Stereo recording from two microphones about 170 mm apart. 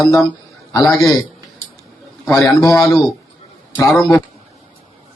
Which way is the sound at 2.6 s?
20° left (ahead or behind).